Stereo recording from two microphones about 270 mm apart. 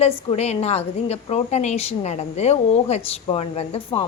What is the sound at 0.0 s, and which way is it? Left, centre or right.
A woman's voice, left.